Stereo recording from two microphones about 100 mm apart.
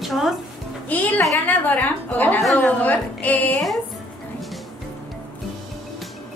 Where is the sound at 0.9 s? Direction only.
15° left (ahead or behind).